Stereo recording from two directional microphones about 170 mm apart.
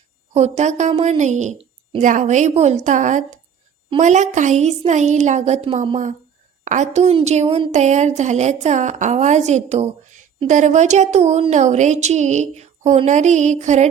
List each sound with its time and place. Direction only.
0.3 s speech: 40° right (ahead or behind)